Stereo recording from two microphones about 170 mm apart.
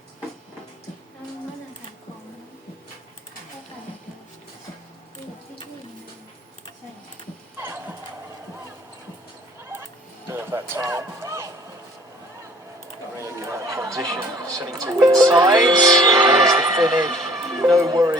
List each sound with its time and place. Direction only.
7.5 s music: 15° right (ahead or behind)
10.2 s music: 15° right (ahead or behind)
13.1 s chatter: 15° right (ahead or behind)
14.5 s music: 20° right (ahead or behind)
16.5 s a sound: 20° right (ahead or behind)
17.6 s music: 20° right (ahead or behind)